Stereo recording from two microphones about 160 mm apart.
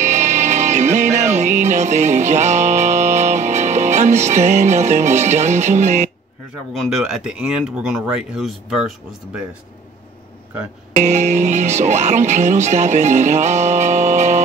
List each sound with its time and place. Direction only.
0.0 s music: 45° right (ahead or behind)
6.7 s speech: centre (ahead or behind)
11.0 s speech: 45° right (ahead or behind)